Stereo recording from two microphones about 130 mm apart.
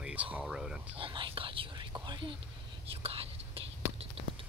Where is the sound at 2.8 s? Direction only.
45° right (ahead or behind).